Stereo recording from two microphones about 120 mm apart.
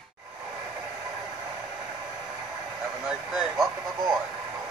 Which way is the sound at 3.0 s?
5° right (ahead or behind).